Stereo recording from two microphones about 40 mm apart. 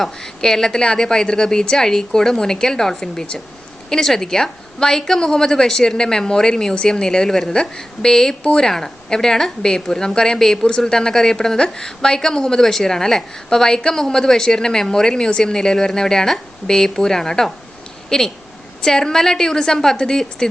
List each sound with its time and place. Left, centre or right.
0.0 s a woman's voice: centre